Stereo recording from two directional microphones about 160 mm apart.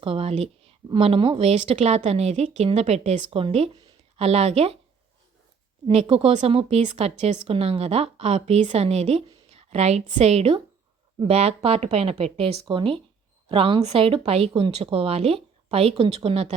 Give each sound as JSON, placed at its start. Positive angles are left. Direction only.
{"t": 0.0, "sound": "speech", "side_deg": -35}
{"t": 5.9, "sound": "speech", "side_deg": -40}